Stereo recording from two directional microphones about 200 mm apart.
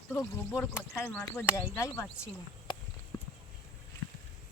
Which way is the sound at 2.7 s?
25° left (ahead or behind).